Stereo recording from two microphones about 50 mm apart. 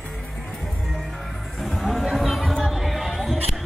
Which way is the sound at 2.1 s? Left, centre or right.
Centre.